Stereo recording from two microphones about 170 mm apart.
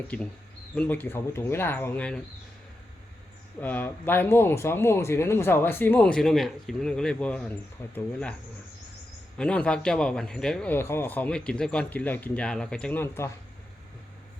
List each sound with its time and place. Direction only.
0.8 s speech: 10° left (ahead or behind)
3.6 s speech: 10° left (ahead or behind)
9.4 s a man's voice: 5° left (ahead or behind)